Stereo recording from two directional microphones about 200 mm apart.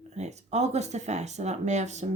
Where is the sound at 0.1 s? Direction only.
35° right (ahead or behind).